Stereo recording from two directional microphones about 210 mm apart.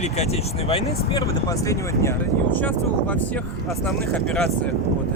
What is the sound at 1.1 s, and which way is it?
Speech, 15° left (ahead or behind).